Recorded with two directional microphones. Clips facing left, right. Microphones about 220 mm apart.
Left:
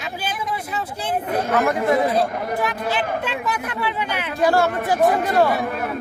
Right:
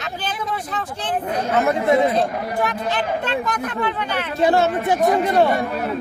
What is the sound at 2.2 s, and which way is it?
Speech, 10° left (ahead or behind).